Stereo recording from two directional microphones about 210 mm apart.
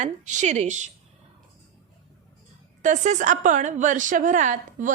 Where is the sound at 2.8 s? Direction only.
35° right (ahead or behind).